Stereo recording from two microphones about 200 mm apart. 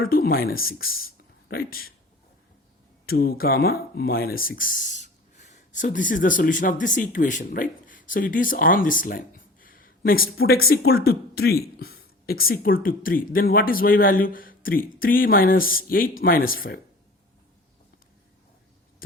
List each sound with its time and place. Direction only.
0.0 s speech: 50° left (ahead or behind)
3.1 s speech: 50° left (ahead or behind)